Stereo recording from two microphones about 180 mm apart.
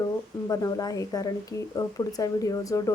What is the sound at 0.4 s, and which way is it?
Speech, 20° left (ahead or behind).